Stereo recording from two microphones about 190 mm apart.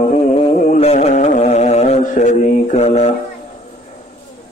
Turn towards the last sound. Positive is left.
turn(degrees=35)  # may be behind; listen again after turning